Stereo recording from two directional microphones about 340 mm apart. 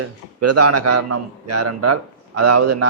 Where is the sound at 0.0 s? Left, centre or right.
Right.